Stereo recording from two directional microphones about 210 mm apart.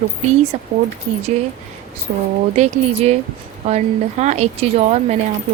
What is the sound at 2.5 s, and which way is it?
A woman's voice, 30° right (ahead or behind).